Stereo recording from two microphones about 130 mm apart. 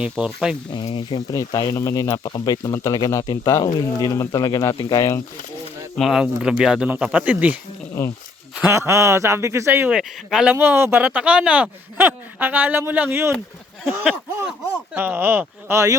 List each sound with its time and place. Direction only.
0.0 s speech: centre (ahead or behind)
0.9 s speech: 30° left (ahead or behind)
6.0 s speech: 5° right (ahead or behind)
8.7 s a man's voice: 20° right (ahead or behind)
9.9 s speech: 5° right (ahead or behind)
14.0 s a sound: 10° right (ahead or behind)
14.9 s speech: 15° right (ahead or behind)